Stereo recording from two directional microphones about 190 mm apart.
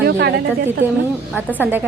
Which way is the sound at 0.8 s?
10° right (ahead or behind).